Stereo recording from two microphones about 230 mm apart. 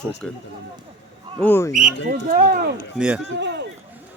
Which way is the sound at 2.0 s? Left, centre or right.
Right.